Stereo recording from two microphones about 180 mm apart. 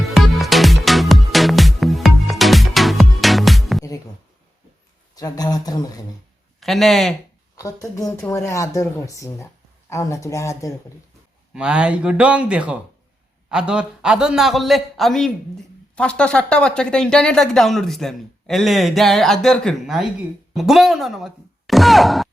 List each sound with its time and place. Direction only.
0.0 s music: centre (ahead or behind)
5.1 s a man's voice: 20° left (ahead or behind)
6.6 s speech: centre (ahead or behind)
7.5 s speech: 20° left (ahead or behind)
11.5 s speech: 5° right (ahead or behind)